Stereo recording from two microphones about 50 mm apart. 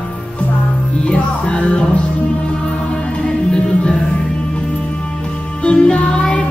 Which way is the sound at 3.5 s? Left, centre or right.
Centre.